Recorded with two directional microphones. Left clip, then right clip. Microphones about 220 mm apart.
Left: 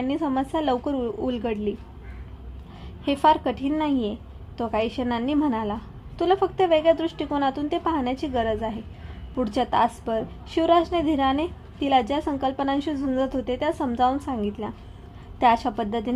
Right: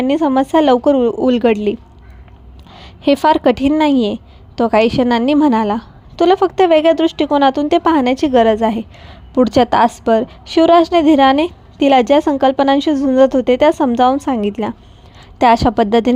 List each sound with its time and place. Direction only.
0.0 s a woman's voice: 45° right (ahead or behind)
2.7 s a woman's voice: 45° right (ahead or behind)